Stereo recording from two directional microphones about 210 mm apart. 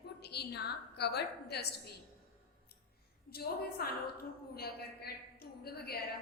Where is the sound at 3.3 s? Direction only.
50° left (ahead or behind).